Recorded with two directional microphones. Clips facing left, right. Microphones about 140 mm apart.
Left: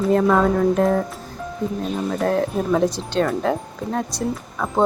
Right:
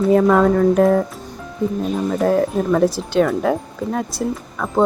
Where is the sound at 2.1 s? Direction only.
Centre (ahead or behind).